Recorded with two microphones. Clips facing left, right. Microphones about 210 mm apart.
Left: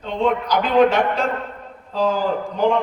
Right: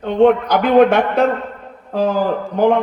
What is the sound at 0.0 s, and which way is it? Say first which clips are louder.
A man's voice: right 8 dB; 55° right (ahead or behind).